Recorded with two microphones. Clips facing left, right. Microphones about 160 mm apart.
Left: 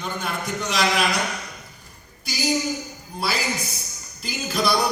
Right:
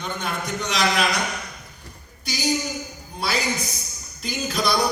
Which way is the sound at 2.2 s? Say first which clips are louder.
Left 1 dB; 5° left (ahead or behind).